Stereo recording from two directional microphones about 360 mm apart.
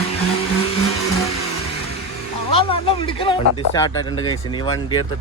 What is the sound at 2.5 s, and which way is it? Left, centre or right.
Speech, centre.